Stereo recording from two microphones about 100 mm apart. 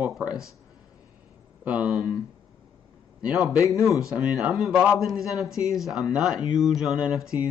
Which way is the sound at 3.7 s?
30° left (ahead or behind).